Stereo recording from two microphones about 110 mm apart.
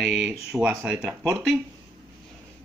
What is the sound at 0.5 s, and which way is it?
Speech, 20° right (ahead or behind).